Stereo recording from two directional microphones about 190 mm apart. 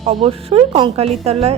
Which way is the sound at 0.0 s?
30° right (ahead or behind).